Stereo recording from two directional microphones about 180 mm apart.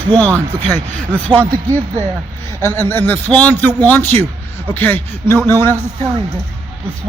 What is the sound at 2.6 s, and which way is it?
A man's voice, 10° left (ahead or behind).